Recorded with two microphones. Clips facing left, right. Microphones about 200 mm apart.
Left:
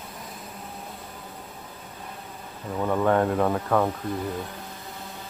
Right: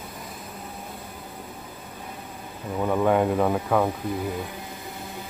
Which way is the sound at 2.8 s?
5° right (ahead or behind).